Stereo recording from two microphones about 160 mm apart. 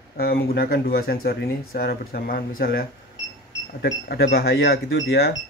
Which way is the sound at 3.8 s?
80° left.